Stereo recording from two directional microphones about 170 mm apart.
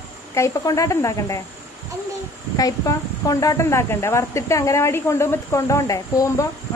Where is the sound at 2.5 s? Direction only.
20° left (ahead or behind).